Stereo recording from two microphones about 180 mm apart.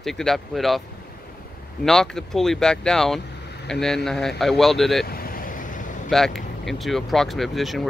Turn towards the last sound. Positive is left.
turn(degrees=0)  # may be behind; listen again after turning